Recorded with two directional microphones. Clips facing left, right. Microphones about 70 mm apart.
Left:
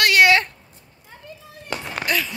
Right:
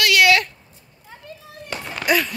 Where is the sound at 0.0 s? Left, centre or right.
Left.